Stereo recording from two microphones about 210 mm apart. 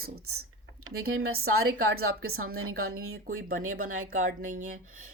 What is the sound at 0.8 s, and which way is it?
Speech, 75° right (ahead or behind).